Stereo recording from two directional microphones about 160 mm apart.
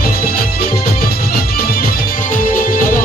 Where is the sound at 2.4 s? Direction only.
60° left (ahead or behind).